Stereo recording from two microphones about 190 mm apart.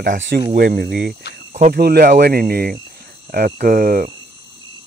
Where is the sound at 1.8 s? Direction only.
55° right (ahead or behind).